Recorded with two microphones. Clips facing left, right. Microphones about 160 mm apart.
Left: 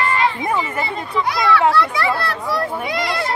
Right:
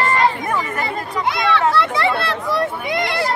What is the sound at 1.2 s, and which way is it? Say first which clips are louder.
A child's voice: left 2 dB; 25° right (ahead or behind).